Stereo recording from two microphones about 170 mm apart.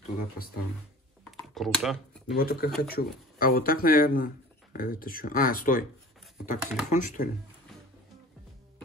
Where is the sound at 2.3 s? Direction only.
60° left (ahead or behind).